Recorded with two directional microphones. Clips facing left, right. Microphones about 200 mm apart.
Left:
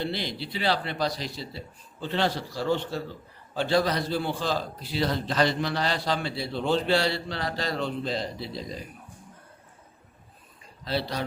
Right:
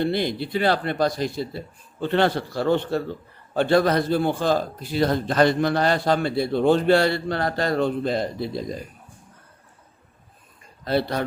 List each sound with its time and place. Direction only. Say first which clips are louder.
0.0 s a man's voice: right 8 dB; 50° right (ahead or behind)
10.8 s speech: right 6 dB; 55° right (ahead or behind)